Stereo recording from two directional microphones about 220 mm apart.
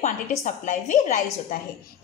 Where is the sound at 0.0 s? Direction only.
30° left (ahead or behind).